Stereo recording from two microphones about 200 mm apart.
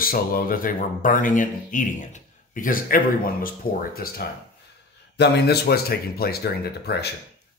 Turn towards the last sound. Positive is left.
turn(degrees=55)  # may be behind; listen again after turning